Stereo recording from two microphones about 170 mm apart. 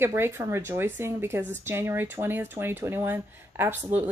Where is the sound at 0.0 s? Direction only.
15° right (ahead or behind).